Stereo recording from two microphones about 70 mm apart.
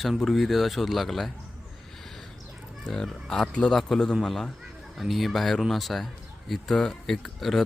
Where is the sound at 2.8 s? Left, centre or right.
Centre.